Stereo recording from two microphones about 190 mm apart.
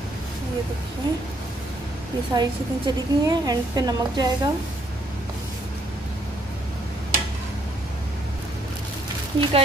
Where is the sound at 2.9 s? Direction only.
20° right (ahead or behind).